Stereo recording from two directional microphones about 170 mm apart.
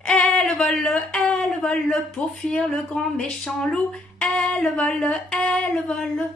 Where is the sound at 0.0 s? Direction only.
5° left (ahead or behind).